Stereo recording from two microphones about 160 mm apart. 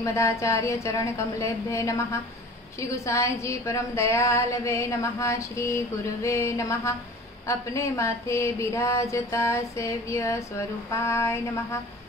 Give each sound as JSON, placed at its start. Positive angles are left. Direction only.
{"t": 0.0, "sound": "a woman's voice", "side_deg": 20}